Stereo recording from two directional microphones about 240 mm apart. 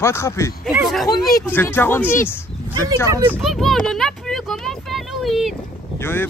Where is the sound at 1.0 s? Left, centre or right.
Centre.